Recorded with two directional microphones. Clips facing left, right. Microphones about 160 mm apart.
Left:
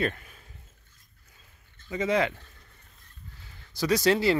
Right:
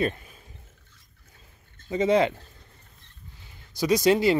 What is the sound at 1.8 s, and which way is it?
Speech, 25° right (ahead or behind).